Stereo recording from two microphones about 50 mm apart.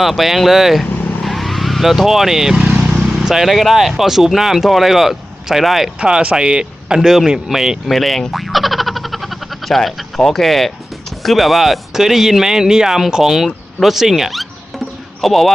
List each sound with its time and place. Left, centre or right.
0.0 s speech: centre
1.2 s vehicle: centre
2.7 s vehicle: right
3.1 s speech: centre
6.0 s speech: centre
7.9 s a sound: centre
11.2 s speech: centre